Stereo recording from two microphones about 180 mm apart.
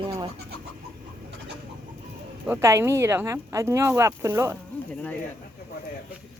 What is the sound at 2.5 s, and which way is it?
Speech, 15° right (ahead or behind).